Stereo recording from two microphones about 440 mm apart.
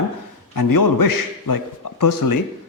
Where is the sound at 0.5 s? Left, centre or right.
Left.